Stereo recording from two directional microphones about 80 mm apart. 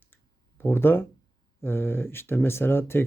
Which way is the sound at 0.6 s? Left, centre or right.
Left.